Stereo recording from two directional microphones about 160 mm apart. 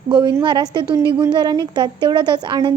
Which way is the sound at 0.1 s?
30° right (ahead or behind).